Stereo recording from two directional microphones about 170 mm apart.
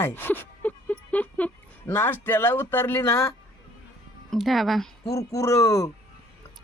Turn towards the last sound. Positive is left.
turn(degrees=20)  # may be behind; listen again after turning